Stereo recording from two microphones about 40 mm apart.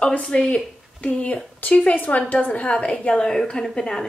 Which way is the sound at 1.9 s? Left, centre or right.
Left.